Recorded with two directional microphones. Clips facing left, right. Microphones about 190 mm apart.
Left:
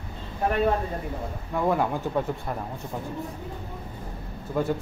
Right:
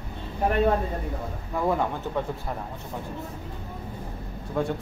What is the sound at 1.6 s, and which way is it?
Speech, centre (ahead or behind).